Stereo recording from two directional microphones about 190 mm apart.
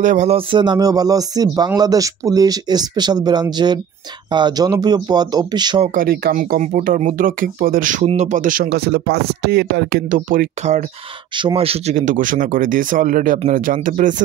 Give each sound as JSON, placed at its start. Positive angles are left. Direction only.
{"t": 0.0, "sound": "speech", "side_deg": -40}
{"t": 0.5, "sound": "speech", "side_deg": -25}
{"t": 5.9, "sound": "speech", "side_deg": -50}
{"t": 10.1, "sound": "speech", "side_deg": -45}
{"t": 11.4, "sound": "speech", "side_deg": -30}